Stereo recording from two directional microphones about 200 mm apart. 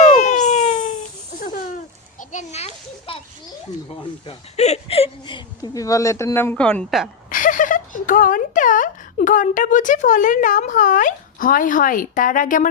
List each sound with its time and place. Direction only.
0.0 s a sound: 35° left (ahead or behind)
2.3 s children playing: 30° left (ahead or behind)
4.3 s speech: 30° left (ahead or behind); by 7.1 s centre (ahead or behind)
7.3 s speech: 40° left (ahead or behind)